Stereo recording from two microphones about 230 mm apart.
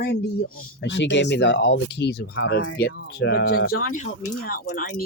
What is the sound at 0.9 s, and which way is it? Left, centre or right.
Speech, left.